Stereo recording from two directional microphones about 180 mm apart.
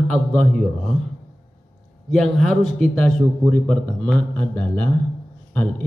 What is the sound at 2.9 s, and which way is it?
A man's voice, 5° left (ahead or behind).